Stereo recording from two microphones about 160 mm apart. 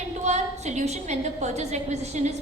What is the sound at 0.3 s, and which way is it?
A woman's voice, 45° right (ahead or behind).